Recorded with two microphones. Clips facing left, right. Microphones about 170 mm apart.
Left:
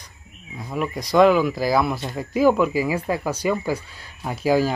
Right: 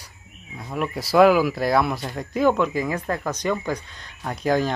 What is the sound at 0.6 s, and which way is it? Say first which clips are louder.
Speech: left 1 dB; centre (ahead or behind).